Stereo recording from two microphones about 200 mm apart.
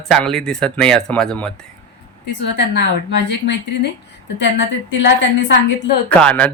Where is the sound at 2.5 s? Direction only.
60° left (ahead or behind).